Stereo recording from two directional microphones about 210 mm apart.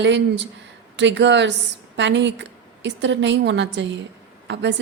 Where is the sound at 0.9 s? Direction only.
60° right (ahead or behind).